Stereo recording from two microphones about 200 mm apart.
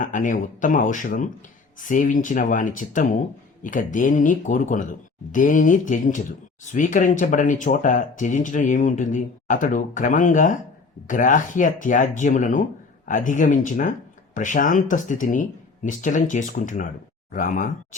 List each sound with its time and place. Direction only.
0.0 s speech: 40° left (ahead or behind)